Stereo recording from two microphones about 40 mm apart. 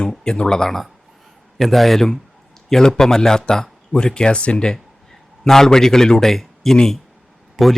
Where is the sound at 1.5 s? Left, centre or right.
Centre.